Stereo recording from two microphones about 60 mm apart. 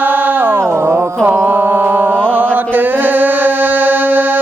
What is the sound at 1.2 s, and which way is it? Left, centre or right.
Mantra, right.